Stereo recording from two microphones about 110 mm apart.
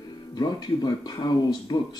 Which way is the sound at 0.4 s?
40° left (ahead or behind).